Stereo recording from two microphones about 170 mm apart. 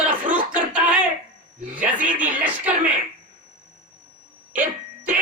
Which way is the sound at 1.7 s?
50° right (ahead or behind).